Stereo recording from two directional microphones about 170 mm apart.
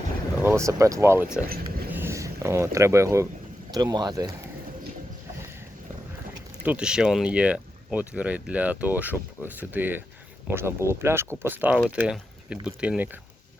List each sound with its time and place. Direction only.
0.4 s speech: 15° right (ahead or behind)
6.6 s speech: 10° right (ahead or behind)